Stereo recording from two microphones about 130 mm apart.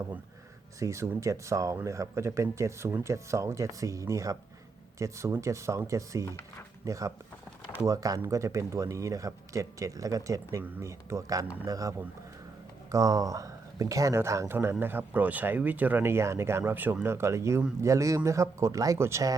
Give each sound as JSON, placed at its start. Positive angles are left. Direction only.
{"t": 0.8, "sound": "speech", "side_deg": -25}